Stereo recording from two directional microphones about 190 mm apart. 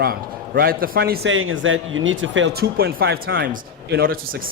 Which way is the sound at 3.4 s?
50° right (ahead or behind).